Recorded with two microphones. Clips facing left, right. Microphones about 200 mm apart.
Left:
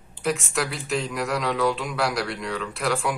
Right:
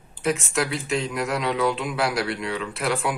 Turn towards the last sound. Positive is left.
turn(degrees=0)  # may be behind; listen again after turning